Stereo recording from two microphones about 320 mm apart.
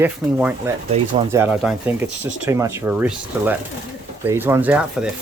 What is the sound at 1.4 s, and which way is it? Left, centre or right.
Speech, centre.